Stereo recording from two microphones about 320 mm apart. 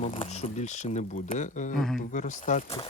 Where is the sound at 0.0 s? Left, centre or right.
Centre.